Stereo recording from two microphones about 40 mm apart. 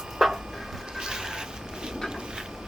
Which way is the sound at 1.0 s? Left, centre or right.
Centre.